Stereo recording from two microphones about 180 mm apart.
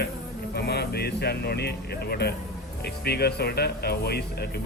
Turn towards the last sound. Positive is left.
turn(degrees=60)  # may be behind; listen again after turning